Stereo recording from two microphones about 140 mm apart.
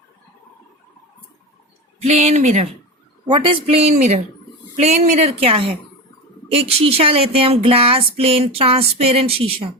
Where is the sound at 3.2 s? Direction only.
35° right (ahead or behind).